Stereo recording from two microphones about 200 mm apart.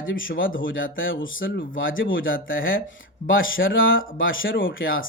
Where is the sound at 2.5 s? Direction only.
45° left (ahead or behind).